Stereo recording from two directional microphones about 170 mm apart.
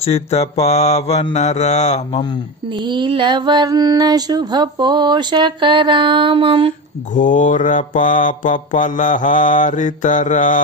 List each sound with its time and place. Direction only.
0.0 s mantra: 35° left (ahead or behind)
2.7 s mantra: 25° right (ahead or behind)
7.2 s mantra: 50° left (ahead or behind)